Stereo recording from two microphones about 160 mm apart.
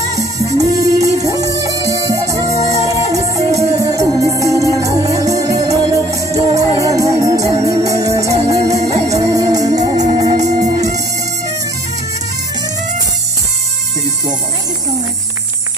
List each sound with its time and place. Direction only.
0.6 s music: 20° right (ahead or behind)